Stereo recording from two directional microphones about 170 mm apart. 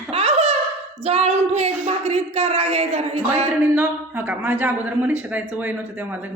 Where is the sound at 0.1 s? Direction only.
35° right (ahead or behind).